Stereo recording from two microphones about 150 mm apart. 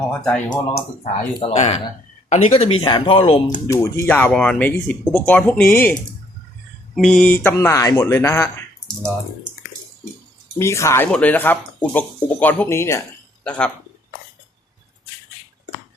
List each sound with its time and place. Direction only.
0.1 s speech: 5° left (ahead or behind)
1.4 s speech: 40° left (ahead or behind)
3.7 s speech: 20° left (ahead or behind)
6.9 s speech: 5° left (ahead or behind); by 8.4 s 20° left (ahead or behind)
10.6 s speech: 20° left (ahead or behind)